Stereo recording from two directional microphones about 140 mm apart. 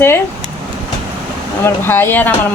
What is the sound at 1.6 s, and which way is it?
Speech, 15° left (ahead or behind).